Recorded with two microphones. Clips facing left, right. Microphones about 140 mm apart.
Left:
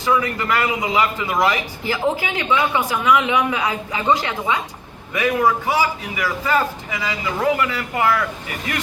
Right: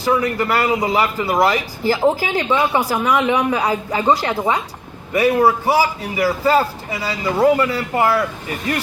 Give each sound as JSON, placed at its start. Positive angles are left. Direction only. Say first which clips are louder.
{"t": 0.0, "sound": "a man's voice", "louder": "right 2 dB", "side_deg": -35}